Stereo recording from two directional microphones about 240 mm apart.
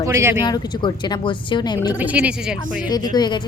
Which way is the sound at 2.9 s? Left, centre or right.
Centre.